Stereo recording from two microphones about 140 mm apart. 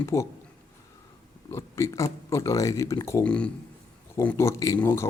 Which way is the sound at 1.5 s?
20° left (ahead or behind).